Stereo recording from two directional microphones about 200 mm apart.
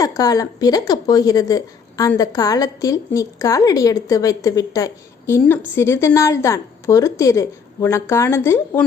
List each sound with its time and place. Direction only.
0.0 s a woman's voice: 15° left (ahead or behind)